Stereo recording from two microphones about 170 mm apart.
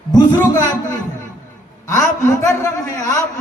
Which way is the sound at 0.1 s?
25° left (ahead or behind).